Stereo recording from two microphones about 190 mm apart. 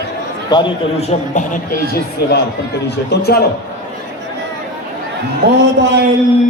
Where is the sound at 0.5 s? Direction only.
25° left (ahead or behind).